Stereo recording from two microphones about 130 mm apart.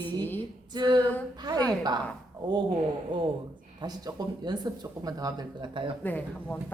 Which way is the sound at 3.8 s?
30° right (ahead or behind).